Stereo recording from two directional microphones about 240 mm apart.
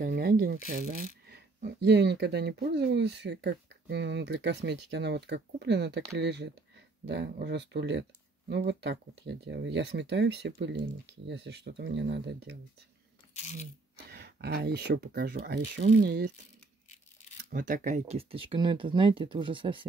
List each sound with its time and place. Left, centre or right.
0.0 s speech: right
13.4 s speech: left
14.1 s speech: right
16.9 s a sound: left
17.5 s speech: right